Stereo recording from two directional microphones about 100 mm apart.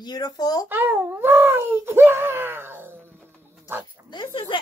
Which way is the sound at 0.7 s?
20° right (ahead or behind).